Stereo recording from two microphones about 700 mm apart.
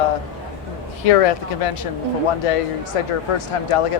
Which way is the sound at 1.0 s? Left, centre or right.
Left.